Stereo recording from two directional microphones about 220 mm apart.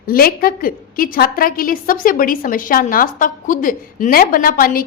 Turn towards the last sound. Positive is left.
turn(degrees=40)  # may be behind; listen again after turning